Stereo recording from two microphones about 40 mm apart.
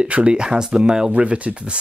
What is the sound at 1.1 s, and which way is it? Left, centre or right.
Speech, right.